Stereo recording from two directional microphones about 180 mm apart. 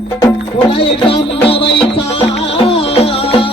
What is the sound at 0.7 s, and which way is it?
Speech, 30° left (ahead or behind).